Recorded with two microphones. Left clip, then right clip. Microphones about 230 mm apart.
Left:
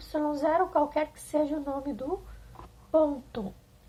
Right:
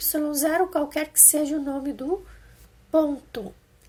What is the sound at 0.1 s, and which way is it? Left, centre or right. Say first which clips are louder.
A woman's voice: right 2 dB; right.